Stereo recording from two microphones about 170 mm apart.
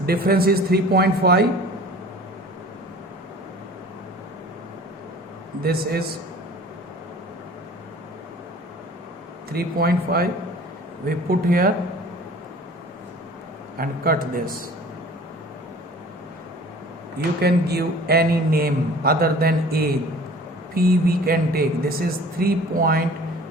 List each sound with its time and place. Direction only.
0.0 s a man's voice: 65° right (ahead or behind)
5.6 s a man's voice: 65° right (ahead or behind)
9.5 s a man's voice: 65° right (ahead or behind)
11.3 s a man's voice: 60° right (ahead or behind)
13.7 s a man's voice: 60° right (ahead or behind)
17.4 s a man's voice: 70° right (ahead or behind)